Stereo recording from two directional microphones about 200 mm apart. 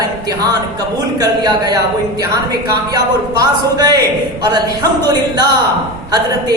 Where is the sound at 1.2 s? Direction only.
20° right (ahead or behind).